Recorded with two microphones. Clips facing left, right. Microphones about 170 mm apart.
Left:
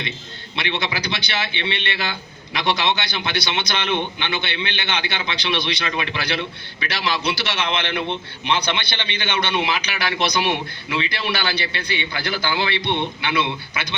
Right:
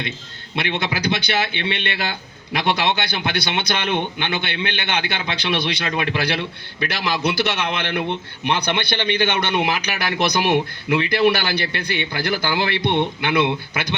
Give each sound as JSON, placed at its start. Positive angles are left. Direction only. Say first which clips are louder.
{"t": 0.5, "sound": "a man's voice", "louder": "right 2 dB", "side_deg": -55}